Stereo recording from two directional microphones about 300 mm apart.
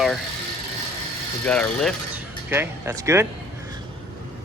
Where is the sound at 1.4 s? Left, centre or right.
Centre.